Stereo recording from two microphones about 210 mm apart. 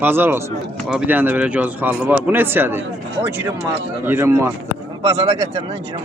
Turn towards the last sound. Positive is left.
turn(degrees=-30)  # may be behind; listen again after turning